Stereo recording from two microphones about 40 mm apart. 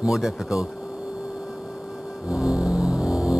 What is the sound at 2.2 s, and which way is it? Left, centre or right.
Music, centre.